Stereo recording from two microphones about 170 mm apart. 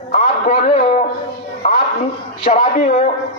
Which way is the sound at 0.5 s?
35° left (ahead or behind).